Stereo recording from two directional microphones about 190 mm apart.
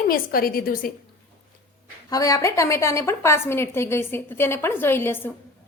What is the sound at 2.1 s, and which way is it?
A woman's voice, 20° left (ahead or behind).